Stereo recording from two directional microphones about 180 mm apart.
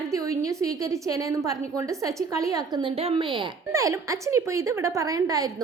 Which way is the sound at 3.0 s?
30° right (ahead or behind).